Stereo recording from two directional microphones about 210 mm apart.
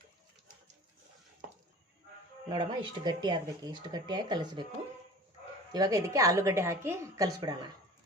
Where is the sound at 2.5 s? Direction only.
20° right (ahead or behind).